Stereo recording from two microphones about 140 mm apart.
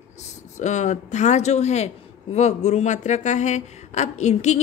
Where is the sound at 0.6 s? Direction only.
60° left (ahead or behind).